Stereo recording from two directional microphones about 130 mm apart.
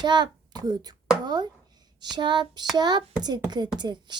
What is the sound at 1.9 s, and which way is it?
A child's voice, 35° right (ahead or behind).